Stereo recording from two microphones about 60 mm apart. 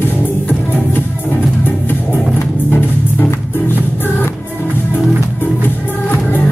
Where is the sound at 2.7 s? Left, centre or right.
Left.